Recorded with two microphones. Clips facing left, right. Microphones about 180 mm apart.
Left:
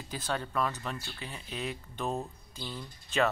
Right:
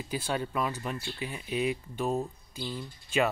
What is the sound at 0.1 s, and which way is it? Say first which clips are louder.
Speech: right 2 dB; 10° right (ahead or behind).